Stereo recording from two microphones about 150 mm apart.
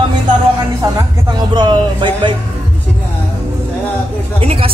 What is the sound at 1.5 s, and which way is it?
Speech, 30° right (ahead or behind).